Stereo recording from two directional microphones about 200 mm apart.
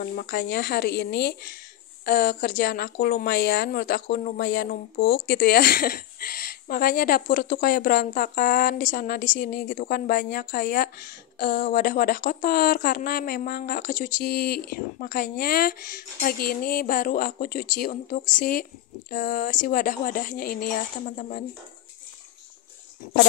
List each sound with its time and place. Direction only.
0.0 s speech: 50° left (ahead or behind)